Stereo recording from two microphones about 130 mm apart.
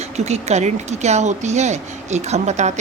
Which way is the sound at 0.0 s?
60° right (ahead or behind).